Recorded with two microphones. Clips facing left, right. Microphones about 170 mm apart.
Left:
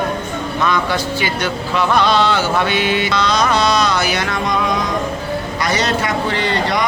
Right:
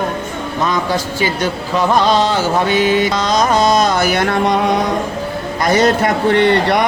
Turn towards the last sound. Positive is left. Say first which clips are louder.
# right 6 dB
turn(degrees=-60)  # may be behind; listen again after turning